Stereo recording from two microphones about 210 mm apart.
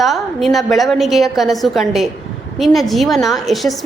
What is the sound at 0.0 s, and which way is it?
A woman's voice, centre (ahead or behind).